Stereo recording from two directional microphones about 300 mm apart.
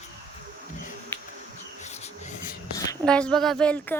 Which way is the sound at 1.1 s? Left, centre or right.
Centre.